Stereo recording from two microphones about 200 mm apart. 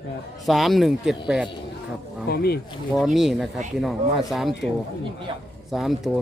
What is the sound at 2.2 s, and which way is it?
Speech, 50° left (ahead or behind).